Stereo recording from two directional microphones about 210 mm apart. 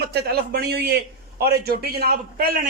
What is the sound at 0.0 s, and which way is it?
A man's voice, 50° right (ahead or behind).